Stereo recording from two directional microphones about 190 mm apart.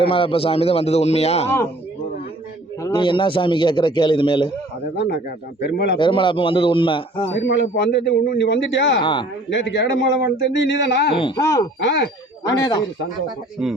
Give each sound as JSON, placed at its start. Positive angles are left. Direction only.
{"t": 0.0, "sound": "a man's voice", "side_deg": 30}
{"t": 2.8, "sound": "a man's voice", "side_deg": 25}
{"t": 4.9, "sound": "speech", "side_deg": 55}
{"t": 6.0, "sound": "a man's voice", "side_deg": 25}
{"t": 7.3, "sound": "a man's voice", "side_deg": 70}
{"t": 11.1, "sound": "a man's voice", "side_deg": 25}
{"t": 11.8, "sound": "speech", "side_deg": 65}